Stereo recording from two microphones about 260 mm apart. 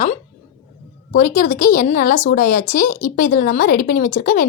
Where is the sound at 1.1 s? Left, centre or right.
Left.